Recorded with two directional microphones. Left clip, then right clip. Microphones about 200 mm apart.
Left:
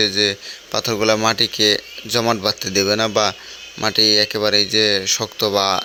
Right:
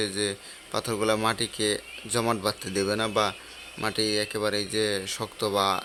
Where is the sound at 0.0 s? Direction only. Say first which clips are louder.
Left 12 dB; 20° left (ahead or behind).